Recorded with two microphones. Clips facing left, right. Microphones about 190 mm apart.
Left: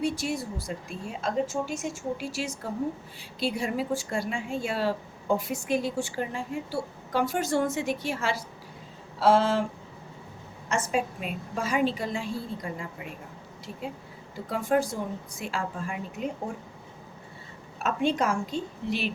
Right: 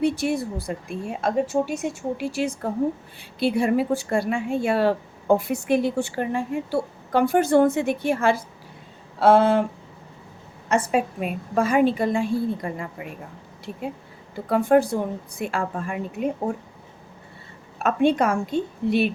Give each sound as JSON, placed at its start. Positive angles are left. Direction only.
{"t": 0.0, "sound": "speech", "side_deg": -60}
{"t": 10.7, "sound": "speech", "side_deg": -60}
{"t": 14.5, "sound": "speech", "side_deg": -60}
{"t": 17.8, "sound": "speech", "side_deg": -60}